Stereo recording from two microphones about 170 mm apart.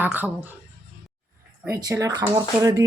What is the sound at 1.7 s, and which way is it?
A woman's voice, 20° right (ahead or behind).